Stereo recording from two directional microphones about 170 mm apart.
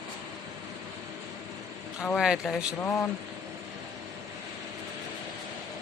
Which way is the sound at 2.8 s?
10° left (ahead or behind).